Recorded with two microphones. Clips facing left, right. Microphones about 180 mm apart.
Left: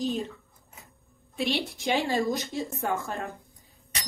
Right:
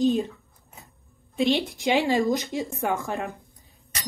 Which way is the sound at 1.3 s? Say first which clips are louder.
Right 6 dB; 20° right (ahead or behind).